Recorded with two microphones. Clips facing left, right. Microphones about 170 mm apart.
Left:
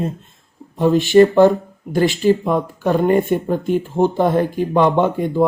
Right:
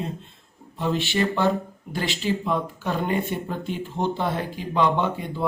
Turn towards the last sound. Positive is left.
turn(degrees=50)  # may be behind; listen again after turning